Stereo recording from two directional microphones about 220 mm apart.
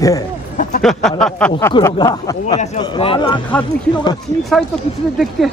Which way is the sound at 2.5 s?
30° left (ahead or behind).